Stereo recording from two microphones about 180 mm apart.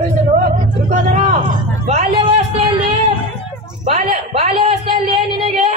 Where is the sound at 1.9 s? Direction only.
35° right (ahead or behind).